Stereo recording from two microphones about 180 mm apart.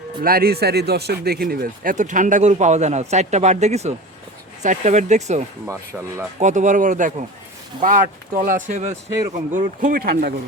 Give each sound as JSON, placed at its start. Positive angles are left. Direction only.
{"t": 0.2, "sound": "speech", "side_deg": -55}
{"t": 6.4, "sound": "speech", "side_deg": -45}